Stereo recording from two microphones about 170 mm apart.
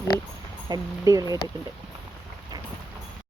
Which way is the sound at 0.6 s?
20° right (ahead or behind).